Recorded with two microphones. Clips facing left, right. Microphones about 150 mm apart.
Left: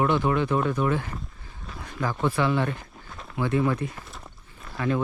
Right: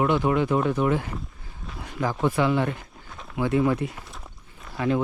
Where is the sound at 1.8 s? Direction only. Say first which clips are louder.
Right 2 dB; 20° right (ahead or behind).